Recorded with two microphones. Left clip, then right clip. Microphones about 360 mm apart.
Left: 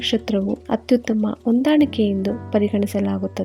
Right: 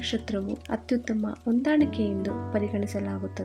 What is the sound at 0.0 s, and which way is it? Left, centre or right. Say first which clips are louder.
Speech: left 9 dB; centre.